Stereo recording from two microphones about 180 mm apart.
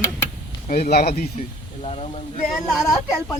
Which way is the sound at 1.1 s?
40° left (ahead or behind).